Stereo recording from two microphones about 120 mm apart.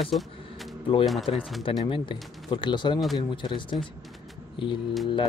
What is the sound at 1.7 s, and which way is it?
Speech, 45° left (ahead or behind).